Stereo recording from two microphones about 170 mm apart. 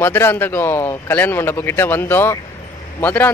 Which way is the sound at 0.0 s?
15° left (ahead or behind).